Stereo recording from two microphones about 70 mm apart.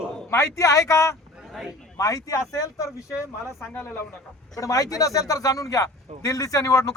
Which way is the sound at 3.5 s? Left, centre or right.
Left.